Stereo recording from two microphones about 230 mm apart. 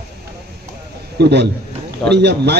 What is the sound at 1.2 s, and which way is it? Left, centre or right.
A man's voice, right.